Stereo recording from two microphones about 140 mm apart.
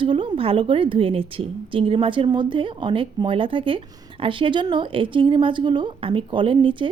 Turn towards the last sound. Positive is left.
turn(degrees=-35)  # may be behind; listen again after turning